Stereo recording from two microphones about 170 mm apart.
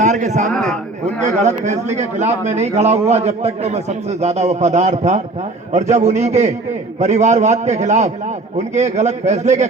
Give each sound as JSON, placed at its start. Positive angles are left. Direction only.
{"t": 0.0, "sound": "a man's voice", "side_deg": -45}
{"t": 0.4, "sound": "a man's voice", "side_deg": 0}
{"t": 1.0, "sound": "a man's voice", "side_deg": -45}